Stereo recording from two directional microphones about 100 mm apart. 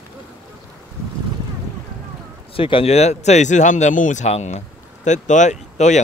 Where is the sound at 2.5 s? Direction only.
65° left (ahead or behind); by 4.4 s 90° left.